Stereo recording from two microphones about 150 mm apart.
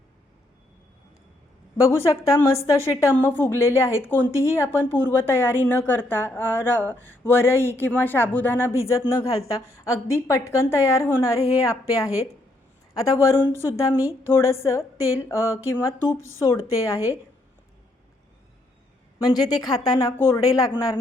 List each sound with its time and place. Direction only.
1.8 s a woman's voice: 20° left (ahead or behind)
19.3 s a woman's voice: 25° left (ahead or behind)